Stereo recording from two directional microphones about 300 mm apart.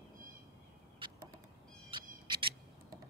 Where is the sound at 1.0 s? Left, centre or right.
Centre.